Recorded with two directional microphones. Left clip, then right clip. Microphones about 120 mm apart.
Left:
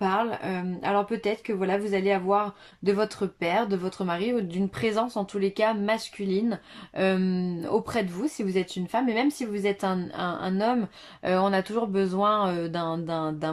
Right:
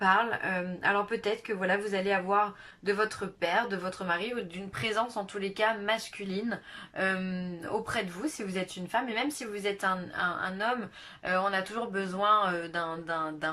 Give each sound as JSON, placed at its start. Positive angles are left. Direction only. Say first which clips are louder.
{"t": 0.0, "sound": "speech", "louder": "even", "side_deg": 35}